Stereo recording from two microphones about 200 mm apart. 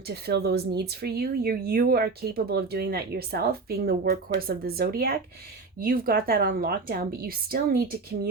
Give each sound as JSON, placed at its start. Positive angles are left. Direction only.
{"t": 0.1, "sound": "speech", "side_deg": -55}